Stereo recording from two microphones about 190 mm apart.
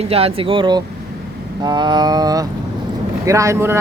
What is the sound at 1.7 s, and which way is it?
Mantra, 25° right (ahead or behind).